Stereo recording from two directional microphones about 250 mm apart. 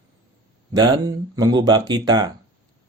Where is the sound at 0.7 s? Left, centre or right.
Centre.